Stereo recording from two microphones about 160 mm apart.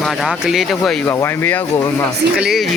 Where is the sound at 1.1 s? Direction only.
15° left (ahead or behind).